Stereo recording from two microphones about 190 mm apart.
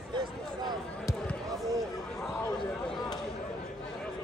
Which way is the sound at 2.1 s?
Centre (ahead or behind).